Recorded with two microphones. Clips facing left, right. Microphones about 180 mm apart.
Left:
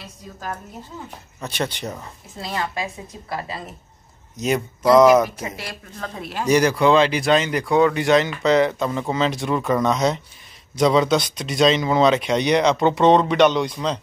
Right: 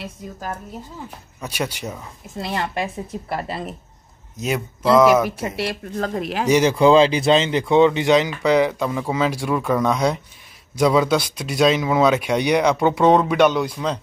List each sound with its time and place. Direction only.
1.4 s speech: 10° right (ahead or behind)
2.4 s speech: 60° right (ahead or behind)
4.8 s speech: centre (ahead or behind)
6.1 s speech: 90° right
6.4 s speech: 20° right (ahead or behind); by 13.9 s 5° right (ahead or behind)